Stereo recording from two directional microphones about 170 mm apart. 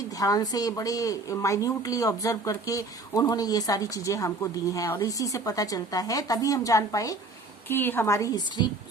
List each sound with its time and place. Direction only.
0.2 s a woman's voice: 20° left (ahead or behind)